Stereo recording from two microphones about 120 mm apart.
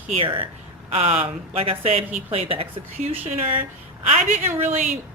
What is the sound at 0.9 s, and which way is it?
Speech, 60° right (ahead or behind).